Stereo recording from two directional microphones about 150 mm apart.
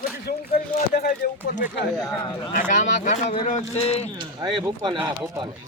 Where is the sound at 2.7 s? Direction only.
55° left (ahead or behind).